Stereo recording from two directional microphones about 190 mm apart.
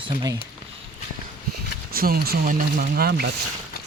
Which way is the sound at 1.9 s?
50° right (ahead or behind).